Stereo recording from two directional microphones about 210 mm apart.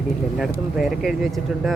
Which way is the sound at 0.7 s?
Centre (ahead or behind).